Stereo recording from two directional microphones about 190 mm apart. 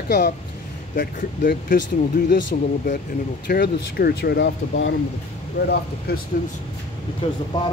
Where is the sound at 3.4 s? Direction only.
60° left (ahead or behind).